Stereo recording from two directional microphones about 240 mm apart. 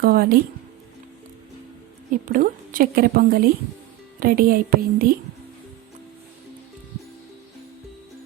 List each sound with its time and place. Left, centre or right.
0.0 s a woman's voice: right
2.0 s a woman's voice: right